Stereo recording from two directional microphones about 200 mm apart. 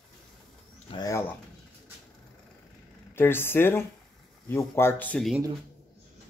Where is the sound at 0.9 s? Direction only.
20° left (ahead or behind).